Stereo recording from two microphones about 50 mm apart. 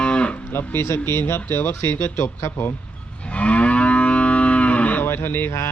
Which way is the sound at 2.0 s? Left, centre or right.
Left.